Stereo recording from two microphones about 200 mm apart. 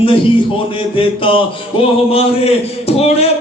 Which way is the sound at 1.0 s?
25° left (ahead or behind).